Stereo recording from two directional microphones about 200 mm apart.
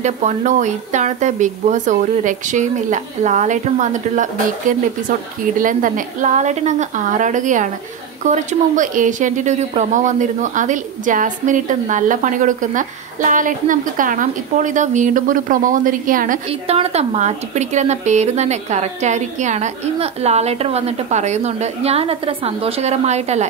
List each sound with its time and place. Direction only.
0.0 s speech: 35° right (ahead or behind)
16.4 s speech: 30° right (ahead or behind)